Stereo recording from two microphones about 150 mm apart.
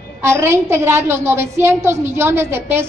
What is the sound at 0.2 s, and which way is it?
A woman's voice, 15° right (ahead or behind).